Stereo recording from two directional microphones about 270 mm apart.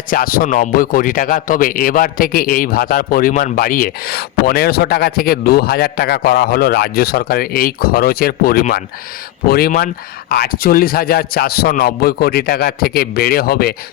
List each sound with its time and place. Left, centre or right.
0.1 s speech: left